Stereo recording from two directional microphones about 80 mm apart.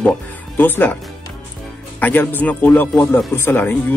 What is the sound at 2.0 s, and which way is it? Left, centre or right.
Speech, left.